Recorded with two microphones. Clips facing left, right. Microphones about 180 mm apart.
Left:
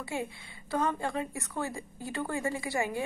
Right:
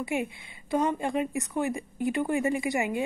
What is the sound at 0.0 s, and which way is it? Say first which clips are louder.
A woman's voice: right 5 dB; 15° right (ahead or behind).